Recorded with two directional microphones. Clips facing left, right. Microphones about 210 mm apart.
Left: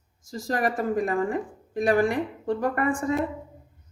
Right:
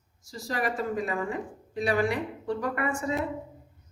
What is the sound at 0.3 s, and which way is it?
A woman's voice, 50° left (ahead or behind).